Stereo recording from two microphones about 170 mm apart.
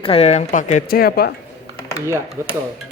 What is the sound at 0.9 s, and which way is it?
Speech, 65° left (ahead or behind).